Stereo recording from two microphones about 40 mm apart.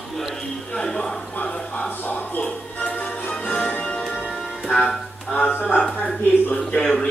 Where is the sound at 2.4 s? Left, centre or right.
Left.